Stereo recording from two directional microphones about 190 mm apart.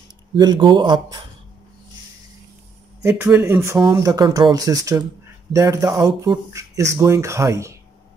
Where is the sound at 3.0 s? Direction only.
10° right (ahead or behind).